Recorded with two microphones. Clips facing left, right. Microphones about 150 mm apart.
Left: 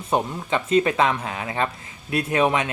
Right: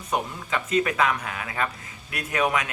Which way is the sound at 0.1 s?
30° left (ahead or behind).